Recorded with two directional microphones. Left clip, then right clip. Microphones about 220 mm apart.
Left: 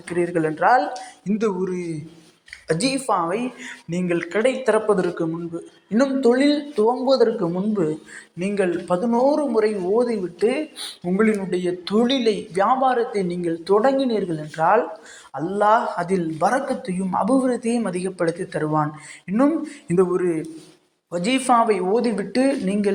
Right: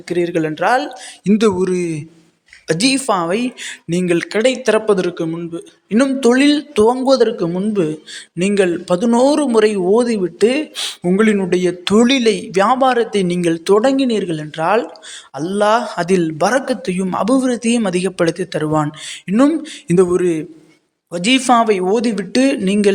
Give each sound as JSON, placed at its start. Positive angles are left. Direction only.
{"t": 0.1, "sound": "a man's voice", "side_deg": -40}